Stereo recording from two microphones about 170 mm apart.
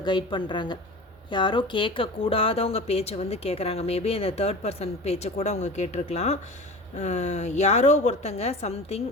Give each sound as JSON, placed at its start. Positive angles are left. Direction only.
{"t": 0.0, "sound": "a woman's voice", "side_deg": 25}